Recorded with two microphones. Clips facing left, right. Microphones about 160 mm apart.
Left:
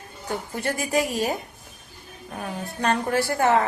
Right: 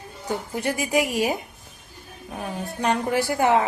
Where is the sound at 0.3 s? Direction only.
15° right (ahead or behind).